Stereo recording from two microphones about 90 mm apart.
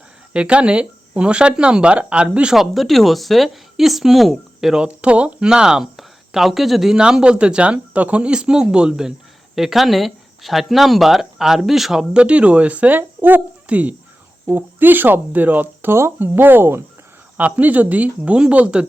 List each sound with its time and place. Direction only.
0.3 s speech: 10° right (ahead or behind)